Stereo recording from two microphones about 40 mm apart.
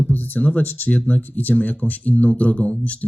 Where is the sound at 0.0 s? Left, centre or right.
Left.